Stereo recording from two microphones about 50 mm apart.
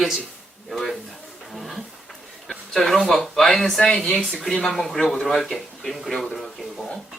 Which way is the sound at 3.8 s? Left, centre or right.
Centre.